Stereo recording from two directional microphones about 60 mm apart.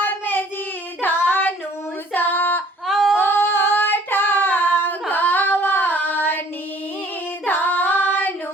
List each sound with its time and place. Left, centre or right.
0.0 s child singing: left
2.1 s female singing: left
2.8 s a sound: centre
3.2 s female singing: left
7.4 s female singing: left